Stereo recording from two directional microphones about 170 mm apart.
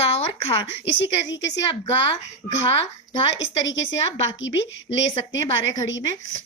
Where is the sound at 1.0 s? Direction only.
90° left.